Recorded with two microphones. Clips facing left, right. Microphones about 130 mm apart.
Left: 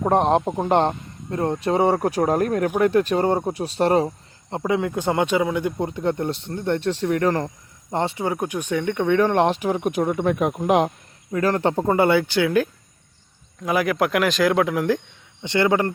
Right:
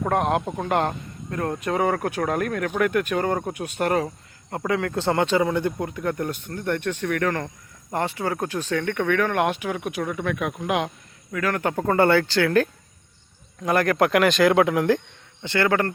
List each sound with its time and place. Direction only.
0.0 s a man's voice: 30° left (ahead or behind); by 5.7 s 5° left (ahead or behind)
5.8 s a man's voice: 25° left (ahead or behind)
11.9 s speech: 15° left (ahead or behind)
15.4 s speech: 20° left (ahead or behind)